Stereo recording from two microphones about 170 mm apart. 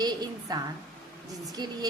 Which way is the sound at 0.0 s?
25° right (ahead or behind).